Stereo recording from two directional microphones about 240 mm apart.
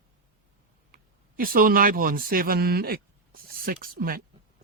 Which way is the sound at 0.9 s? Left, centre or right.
Right.